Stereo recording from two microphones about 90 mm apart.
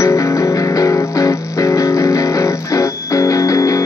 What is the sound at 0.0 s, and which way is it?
Music, 35° left (ahead or behind).